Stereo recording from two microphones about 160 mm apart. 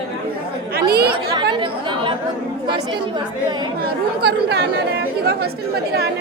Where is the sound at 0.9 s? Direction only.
80° right.